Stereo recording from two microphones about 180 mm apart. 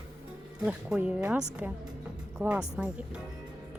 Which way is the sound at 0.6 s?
5° right (ahead or behind).